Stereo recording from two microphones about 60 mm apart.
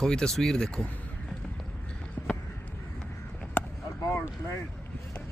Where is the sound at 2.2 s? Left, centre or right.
Left.